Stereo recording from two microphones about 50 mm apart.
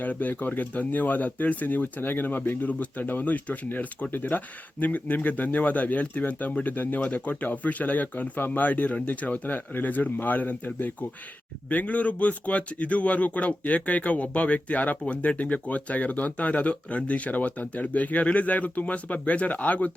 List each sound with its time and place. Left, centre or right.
0.0 s speech: left
11.7 s speech: left